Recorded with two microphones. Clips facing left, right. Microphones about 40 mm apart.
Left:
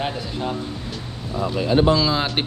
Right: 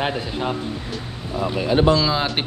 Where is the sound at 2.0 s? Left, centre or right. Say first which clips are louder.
Even; centre.